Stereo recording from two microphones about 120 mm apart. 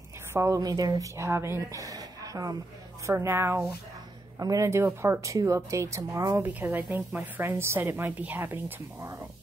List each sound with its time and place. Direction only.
0.3 s speech: 25° right (ahead or behind)
6.4 s a woman's voice: 15° right (ahead or behind)